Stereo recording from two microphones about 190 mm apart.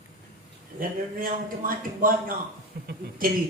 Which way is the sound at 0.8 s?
50° right (ahead or behind).